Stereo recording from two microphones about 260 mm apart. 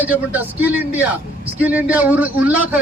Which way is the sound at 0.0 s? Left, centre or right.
Centre.